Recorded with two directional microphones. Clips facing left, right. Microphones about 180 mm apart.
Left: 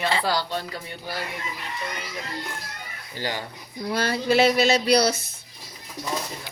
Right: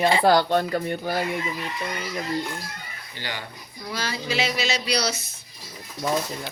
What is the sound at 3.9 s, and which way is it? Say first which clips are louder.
Speech: left 6 dB; 60° left (ahead or behind).